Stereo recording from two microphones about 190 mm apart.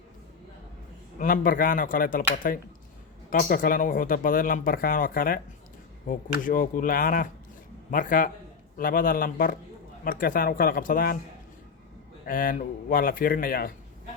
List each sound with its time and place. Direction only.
1.2 s speech: 45° left (ahead or behind)
6.4 s speech: 45° left (ahead or behind)
12.2 s speech: 45° left (ahead or behind)